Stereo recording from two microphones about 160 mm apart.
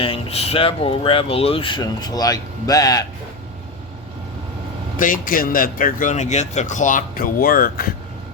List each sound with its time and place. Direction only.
0.0 s speech: 35° left (ahead or behind)
4.9 s a man's voice: 55° left (ahead or behind)